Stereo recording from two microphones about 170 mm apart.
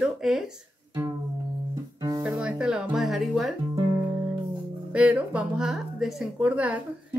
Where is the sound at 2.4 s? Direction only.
5° right (ahead or behind).